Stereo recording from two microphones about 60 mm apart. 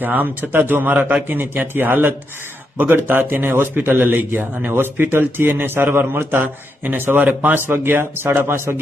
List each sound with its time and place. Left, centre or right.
0.0 s a man's voice: right